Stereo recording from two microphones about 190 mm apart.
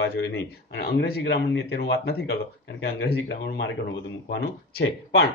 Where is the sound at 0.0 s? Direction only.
60° left (ahead or behind).